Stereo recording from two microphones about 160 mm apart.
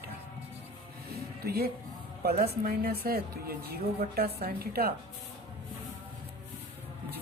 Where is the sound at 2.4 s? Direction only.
65° right (ahead or behind).